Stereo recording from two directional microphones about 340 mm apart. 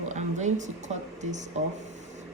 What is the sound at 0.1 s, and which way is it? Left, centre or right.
Speech, right.